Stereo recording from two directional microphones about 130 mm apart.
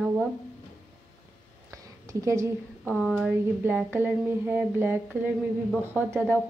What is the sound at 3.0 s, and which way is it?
A woman's voice, 5° right (ahead or behind).